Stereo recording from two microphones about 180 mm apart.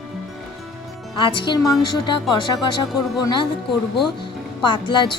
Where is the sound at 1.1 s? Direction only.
25° left (ahead or behind).